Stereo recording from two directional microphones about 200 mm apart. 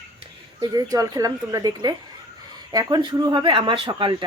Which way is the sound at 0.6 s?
20° right (ahead or behind).